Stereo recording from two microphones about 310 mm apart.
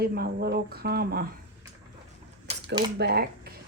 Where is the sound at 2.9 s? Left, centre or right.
Right.